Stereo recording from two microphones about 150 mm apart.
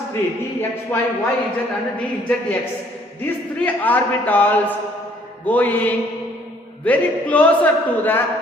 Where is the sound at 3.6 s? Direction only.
10° left (ahead or behind).